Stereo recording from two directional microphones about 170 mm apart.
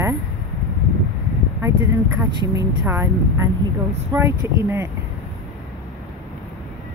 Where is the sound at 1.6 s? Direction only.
15° right (ahead or behind).